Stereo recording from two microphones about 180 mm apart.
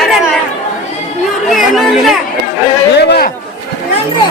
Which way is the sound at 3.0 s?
65° left (ahead or behind).